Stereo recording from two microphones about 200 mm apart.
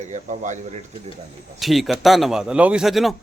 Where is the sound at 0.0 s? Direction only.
40° right (ahead or behind).